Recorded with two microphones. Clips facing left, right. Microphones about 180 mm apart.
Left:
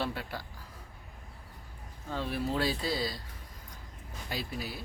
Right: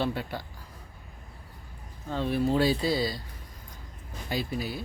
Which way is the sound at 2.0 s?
5° left (ahead or behind).